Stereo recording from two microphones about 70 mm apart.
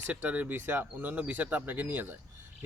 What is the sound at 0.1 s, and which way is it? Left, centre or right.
Speech, right.